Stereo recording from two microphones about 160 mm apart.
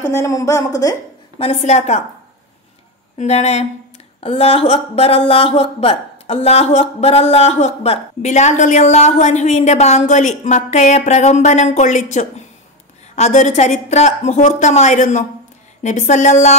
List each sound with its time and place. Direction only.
0.0 s a woman's voice: 15° left (ahead or behind)
1.4 s speech: 40° left (ahead or behind)
3.2 s speech: 45° left (ahead or behind)